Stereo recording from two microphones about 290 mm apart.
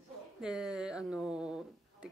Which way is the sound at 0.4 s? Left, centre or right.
Centre.